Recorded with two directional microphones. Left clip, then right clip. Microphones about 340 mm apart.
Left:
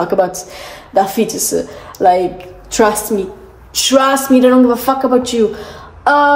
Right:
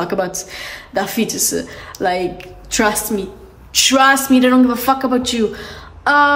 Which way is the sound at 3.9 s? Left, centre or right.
Centre.